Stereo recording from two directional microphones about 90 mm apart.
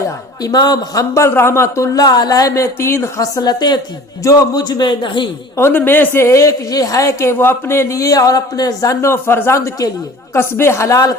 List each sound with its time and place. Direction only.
0.4 s a man's voice: 50° left (ahead or behind)
1.1 s a woman's voice: 30° left (ahead or behind); by 2.6 s 45° left (ahead or behind)
2.8 s a woman's voice: 30° left (ahead or behind); by 5.3 s 65° left (ahead or behind)
5.5 s a woman's voice: 25° left (ahead or behind)